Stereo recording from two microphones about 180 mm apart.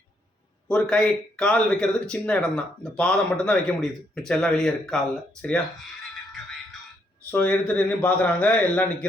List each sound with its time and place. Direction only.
0.7 s speech: 5° left (ahead or behind)
7.3 s speech: 10° left (ahead or behind)